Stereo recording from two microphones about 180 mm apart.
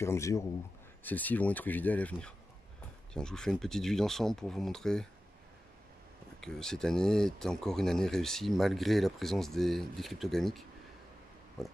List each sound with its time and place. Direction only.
0.0 s speech: 15° left (ahead or behind)
6.4 s speech: 5° left (ahead or behind)